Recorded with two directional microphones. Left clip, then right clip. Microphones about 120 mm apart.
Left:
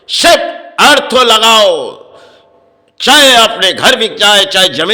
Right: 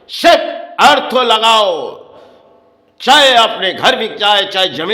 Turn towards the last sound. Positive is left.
turn(degrees=15)  # may be behind; listen again after turning